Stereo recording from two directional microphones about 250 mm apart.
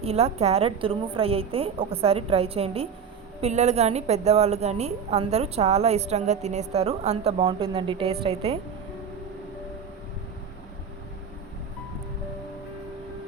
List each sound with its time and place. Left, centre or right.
0.0 s a woman's voice: right